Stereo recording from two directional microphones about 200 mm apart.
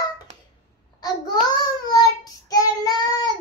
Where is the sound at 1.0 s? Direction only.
20° left (ahead or behind).